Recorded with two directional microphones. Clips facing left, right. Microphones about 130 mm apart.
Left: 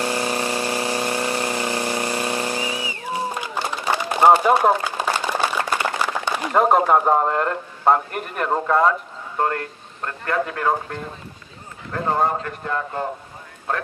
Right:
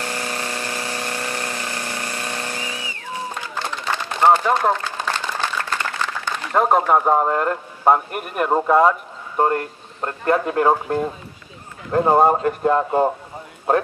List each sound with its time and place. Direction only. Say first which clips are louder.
0.0 s a sound: left 4 dB; 20° left (ahead or behind)
6.6 s a man's voice: even; centre (ahead or behind); by 8.9 s 15° right (ahead or behind)
10.0 s speech: right 4 dB; 25° right (ahead or behind)